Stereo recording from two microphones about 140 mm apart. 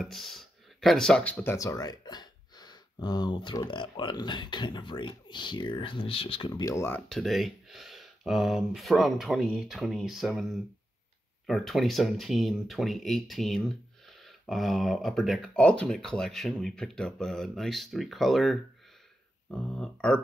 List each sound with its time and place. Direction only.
0.0 s speech: centre (ahead or behind)
1.4 s speech: 20° left (ahead or behind); by 6.6 s 40° left (ahead or behind)
6.6 s speech: 20° left (ahead or behind)
7.1 s speech: centre (ahead or behind)